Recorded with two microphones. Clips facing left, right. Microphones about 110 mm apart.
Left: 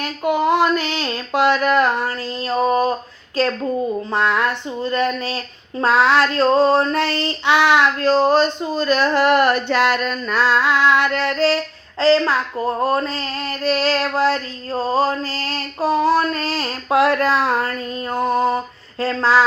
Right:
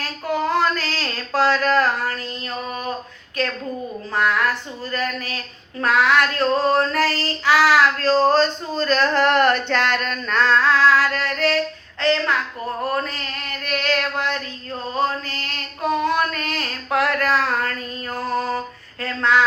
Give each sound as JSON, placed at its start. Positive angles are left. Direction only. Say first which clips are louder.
{"t": 0.0, "sound": "a sound", "louder": "left 5 dB", "side_deg": 15}
{"t": 3.4, "sound": "child singing", "louder": "left 6 dB", "side_deg": 30}
{"t": 12.8, "sound": "female singing", "louder": "left 3 dB", "side_deg": 25}